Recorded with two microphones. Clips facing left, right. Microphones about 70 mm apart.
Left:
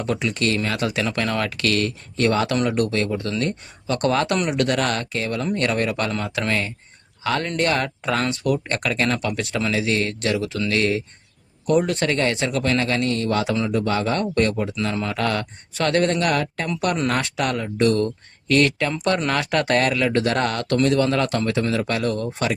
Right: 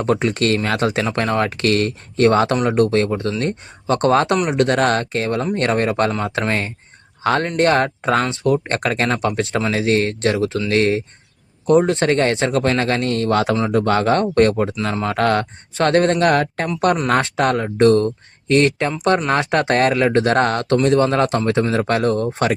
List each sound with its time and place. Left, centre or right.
0.0 s speech: right
0.9 s speech: right